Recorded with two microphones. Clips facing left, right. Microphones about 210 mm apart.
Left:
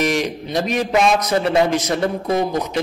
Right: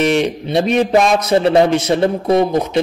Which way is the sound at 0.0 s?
30° right (ahead or behind).